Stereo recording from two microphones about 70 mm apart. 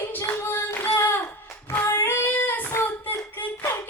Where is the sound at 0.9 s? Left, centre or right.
Left.